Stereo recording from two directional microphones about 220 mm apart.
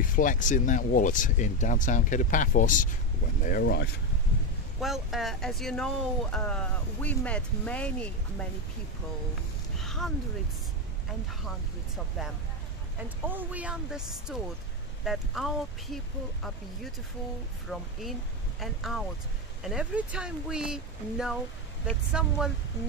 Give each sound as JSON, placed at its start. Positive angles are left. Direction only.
{"t": 0.0, "sound": "speech", "side_deg": 35}
{"t": 4.7, "sound": "speech", "side_deg": 0}
{"t": 9.8, "sound": "a sound", "side_deg": 0}
{"t": 13.2, "sound": "speech", "side_deg": -10}
{"t": 17.7, "sound": "speech", "side_deg": 0}